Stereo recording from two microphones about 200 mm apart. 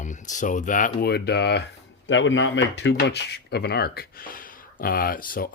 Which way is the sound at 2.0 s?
70° left (ahead or behind).